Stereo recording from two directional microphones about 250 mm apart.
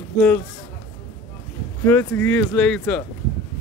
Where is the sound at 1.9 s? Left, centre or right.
Centre.